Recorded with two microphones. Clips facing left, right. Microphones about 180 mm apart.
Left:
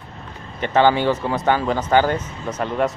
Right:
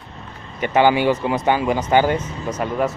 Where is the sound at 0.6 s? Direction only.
10° right (ahead or behind).